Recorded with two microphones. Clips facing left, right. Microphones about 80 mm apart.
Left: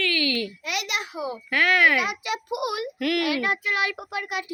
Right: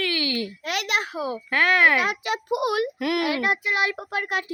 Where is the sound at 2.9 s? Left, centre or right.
Right.